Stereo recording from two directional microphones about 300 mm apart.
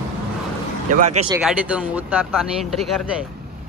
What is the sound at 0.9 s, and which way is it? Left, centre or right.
Speech, right.